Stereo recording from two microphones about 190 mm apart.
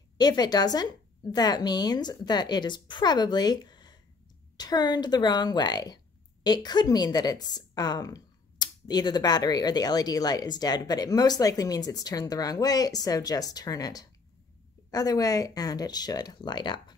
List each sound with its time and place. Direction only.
0.2 s a woman's voice: 20° left (ahead or behind)